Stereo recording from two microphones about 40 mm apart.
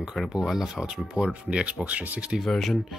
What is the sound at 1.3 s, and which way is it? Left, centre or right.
Speech, right.